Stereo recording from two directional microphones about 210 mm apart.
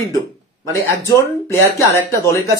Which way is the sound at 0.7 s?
15° left (ahead or behind).